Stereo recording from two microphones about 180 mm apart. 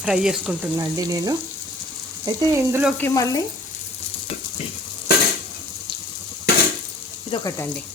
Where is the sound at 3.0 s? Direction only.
15° left (ahead or behind).